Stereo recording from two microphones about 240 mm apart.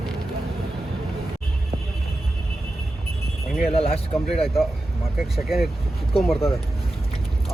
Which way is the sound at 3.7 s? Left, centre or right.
Left.